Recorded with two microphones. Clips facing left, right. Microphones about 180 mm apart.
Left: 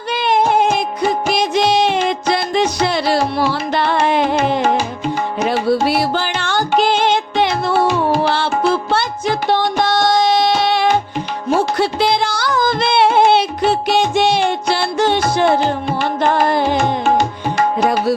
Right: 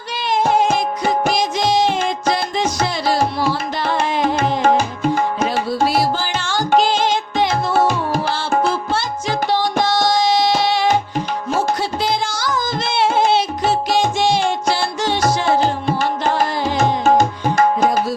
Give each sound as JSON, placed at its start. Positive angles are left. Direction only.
{"t": 0.1, "sound": "music", "side_deg": 60}
{"t": 5.5, "sound": "music", "side_deg": 60}
{"t": 8.7, "sound": "music", "side_deg": 60}
{"t": 11.8, "sound": "music", "side_deg": 65}